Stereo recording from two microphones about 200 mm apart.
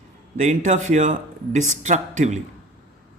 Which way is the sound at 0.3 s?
40° right (ahead or behind).